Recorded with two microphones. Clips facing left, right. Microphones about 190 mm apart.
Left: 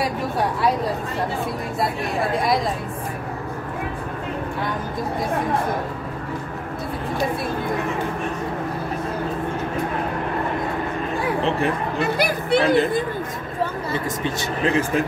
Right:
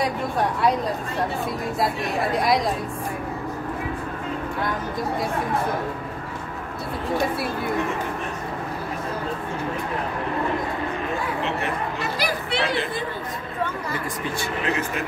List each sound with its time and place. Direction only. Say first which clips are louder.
2.3 s speech: right 1 dB; centre (ahead or behind)
12.0 s speech: left 5 dB; 50° left (ahead or behind)